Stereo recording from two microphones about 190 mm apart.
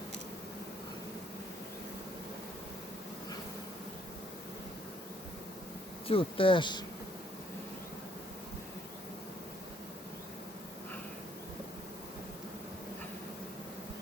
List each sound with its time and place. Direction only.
6.1 s speech: 30° left (ahead or behind)